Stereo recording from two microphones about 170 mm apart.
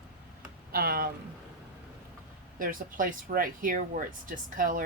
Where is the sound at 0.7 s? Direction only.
60° right (ahead or behind).